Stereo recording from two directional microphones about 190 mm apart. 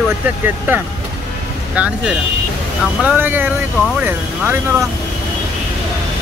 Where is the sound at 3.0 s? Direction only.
10° right (ahead or behind).